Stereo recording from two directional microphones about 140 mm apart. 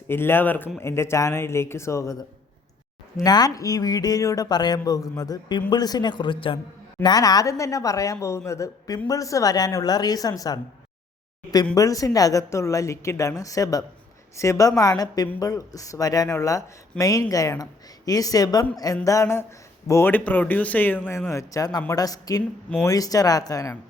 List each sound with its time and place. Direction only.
0.1 s a man's voice: 15° left (ahead or behind)
3.2 s a man's voice: 25° left (ahead or behind)
11.7 s speech: 25° left (ahead or behind)